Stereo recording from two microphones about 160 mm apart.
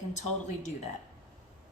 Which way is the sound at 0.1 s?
45° left (ahead or behind).